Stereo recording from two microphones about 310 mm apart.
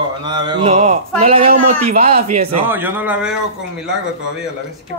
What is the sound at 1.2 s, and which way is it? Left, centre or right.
Speech, centre.